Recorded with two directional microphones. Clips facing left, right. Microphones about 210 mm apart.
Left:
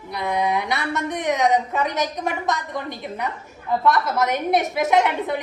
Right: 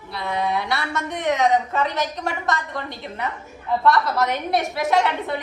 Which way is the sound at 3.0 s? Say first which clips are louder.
Even; centre (ahead or behind).